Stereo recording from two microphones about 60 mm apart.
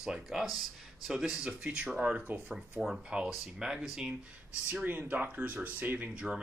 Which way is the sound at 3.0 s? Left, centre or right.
Centre.